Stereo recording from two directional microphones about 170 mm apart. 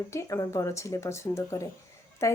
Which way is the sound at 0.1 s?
15° left (ahead or behind).